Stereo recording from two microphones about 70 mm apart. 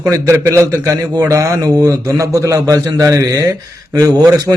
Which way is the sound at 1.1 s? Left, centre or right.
Right.